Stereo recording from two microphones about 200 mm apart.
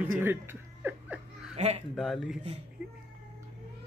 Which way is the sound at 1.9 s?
Centre (ahead or behind).